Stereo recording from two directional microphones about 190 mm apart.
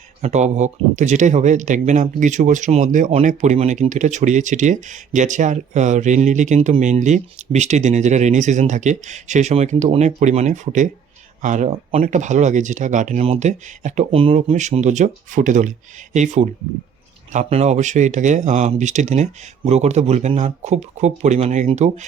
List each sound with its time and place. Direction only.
0.2 s speech: 35° right (ahead or behind)